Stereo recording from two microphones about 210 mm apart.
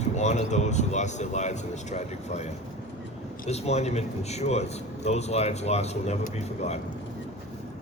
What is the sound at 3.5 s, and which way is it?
A man's voice, 30° left (ahead or behind).